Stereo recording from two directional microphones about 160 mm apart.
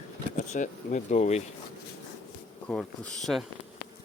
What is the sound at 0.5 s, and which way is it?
Speech, 50° left (ahead or behind).